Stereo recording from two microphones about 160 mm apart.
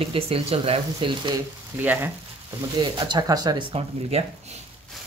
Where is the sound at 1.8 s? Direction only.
10° right (ahead or behind).